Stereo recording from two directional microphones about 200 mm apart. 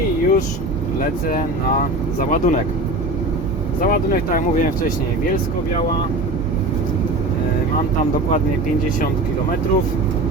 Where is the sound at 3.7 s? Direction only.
45° left (ahead or behind).